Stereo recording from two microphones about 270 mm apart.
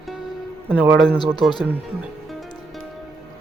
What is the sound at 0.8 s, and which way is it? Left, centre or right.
Speech, centre.